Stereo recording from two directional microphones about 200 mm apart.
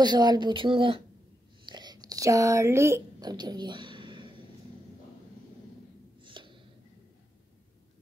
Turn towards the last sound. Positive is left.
turn(degrees=-25)  # may be behind; listen again after turning